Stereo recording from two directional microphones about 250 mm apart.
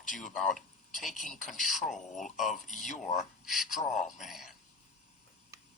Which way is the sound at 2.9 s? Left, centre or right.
Left.